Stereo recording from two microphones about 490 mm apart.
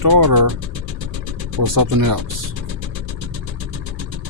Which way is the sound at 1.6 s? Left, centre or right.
Right.